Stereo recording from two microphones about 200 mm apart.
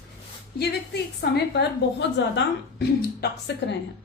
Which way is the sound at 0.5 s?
55° left (ahead or behind).